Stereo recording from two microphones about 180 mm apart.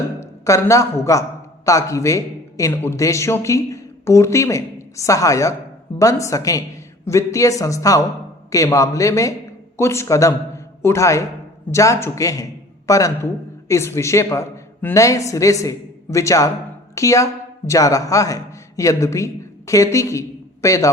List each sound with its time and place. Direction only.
0.2 s a man's voice: 15° left (ahead or behind)